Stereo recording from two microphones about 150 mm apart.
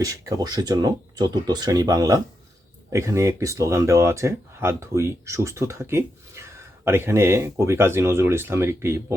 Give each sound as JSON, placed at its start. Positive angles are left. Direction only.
{"t": 0.0, "sound": "speech", "side_deg": -25}